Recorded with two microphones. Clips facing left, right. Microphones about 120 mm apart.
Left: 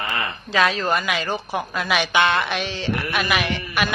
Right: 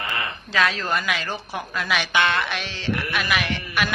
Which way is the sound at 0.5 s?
20° left (ahead or behind).